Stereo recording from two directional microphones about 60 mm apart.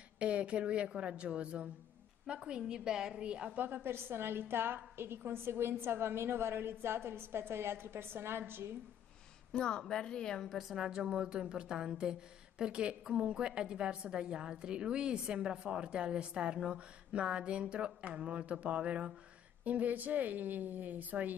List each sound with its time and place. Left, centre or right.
0.2 s mantra: centre
2.2 s speech: centre
3.6 s a woman's voice: right
9.5 s a woman's voice: centre
10.8 s speech: centre
16.5 s mantra: centre